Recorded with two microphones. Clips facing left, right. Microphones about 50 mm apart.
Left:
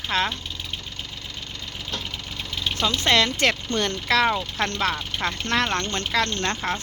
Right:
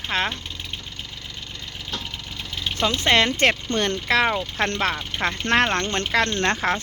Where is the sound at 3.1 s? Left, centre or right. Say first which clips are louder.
Right 2 dB; right.